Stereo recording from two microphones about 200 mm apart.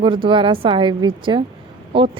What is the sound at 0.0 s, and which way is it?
A woman's voice, 25° right (ahead or behind).